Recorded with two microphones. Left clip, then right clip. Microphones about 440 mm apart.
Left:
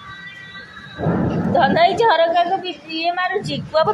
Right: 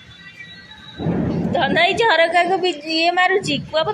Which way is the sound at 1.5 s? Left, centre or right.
Right.